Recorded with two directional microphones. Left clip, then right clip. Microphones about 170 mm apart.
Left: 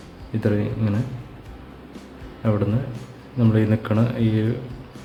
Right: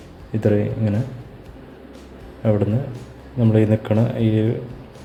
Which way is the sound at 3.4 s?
5° right (ahead or behind).